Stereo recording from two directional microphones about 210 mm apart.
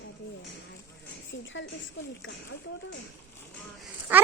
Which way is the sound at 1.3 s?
60° left (ahead or behind).